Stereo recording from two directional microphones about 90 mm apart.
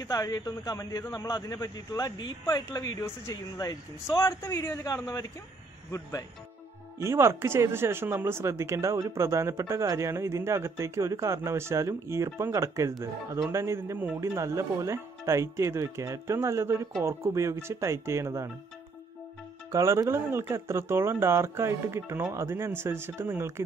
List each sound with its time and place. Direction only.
0.0 s a man's voice: 40° left (ahead or behind)
7.0 s speech: 30° right (ahead or behind)
13.9 s speech: 20° right (ahead or behind)
14.3 s speech: 35° right (ahead or behind)
19.7 s speech: 35° right (ahead or behind)